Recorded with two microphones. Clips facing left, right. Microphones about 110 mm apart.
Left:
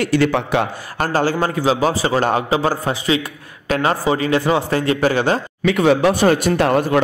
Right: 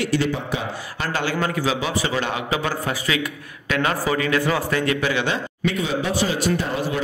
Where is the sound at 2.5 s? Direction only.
30° left (ahead or behind).